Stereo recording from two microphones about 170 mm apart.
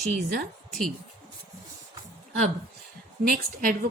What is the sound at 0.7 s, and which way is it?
Speech, centre (ahead or behind).